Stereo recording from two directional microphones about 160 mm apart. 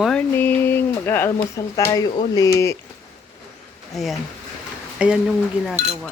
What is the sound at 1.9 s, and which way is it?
Speech, 25° left (ahead or behind).